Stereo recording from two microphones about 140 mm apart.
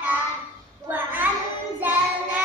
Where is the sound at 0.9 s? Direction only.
15° right (ahead or behind).